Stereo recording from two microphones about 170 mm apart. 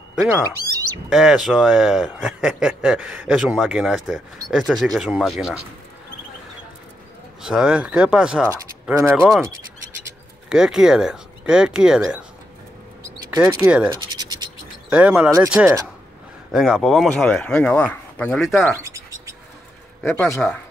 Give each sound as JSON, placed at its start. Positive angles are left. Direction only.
{"t": 0.7, "sound": "speech", "side_deg": -20}
{"t": 1.1, "sound": "a man's voice", "side_deg": 0}
{"t": 7.4, "sound": "speech", "side_deg": -5}
{"t": 10.5, "sound": "a man's voice", "side_deg": -5}
{"t": 13.4, "sound": "speech", "side_deg": -10}
{"t": 14.1, "sound": "scratch", "side_deg": -25}
{"t": 14.9, "sound": "speech", "side_deg": -5}
{"t": 16.5, "sound": "a man's voice", "side_deg": 0}
{"t": 18.7, "sound": "a sound", "side_deg": -15}
{"t": 20.0, "sound": "speech", "side_deg": 10}